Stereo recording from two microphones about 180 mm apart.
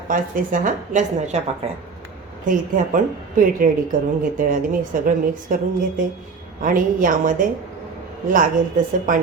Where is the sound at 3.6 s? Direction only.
50° right (ahead or behind).